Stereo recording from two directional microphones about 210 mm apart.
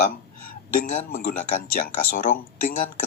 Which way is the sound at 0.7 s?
45° left (ahead or behind).